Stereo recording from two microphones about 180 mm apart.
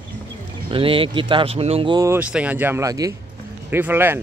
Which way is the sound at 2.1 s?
10° right (ahead or behind).